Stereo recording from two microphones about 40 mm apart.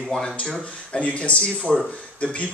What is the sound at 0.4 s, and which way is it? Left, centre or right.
Speech, left.